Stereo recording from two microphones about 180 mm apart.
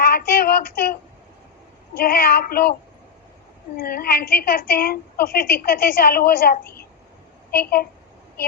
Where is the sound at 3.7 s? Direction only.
55° left (ahead or behind).